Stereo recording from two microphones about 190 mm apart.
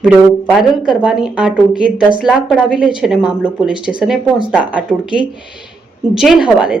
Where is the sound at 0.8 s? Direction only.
5° right (ahead or behind).